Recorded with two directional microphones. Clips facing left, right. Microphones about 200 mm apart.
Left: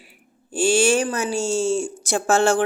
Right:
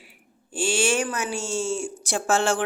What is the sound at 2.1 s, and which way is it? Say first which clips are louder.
Speech: left 5 dB; 45° left (ahead or behind).